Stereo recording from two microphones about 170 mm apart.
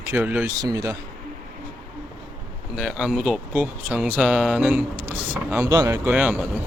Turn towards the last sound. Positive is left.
turn(degrees=-10)  # may be behind; listen again after turning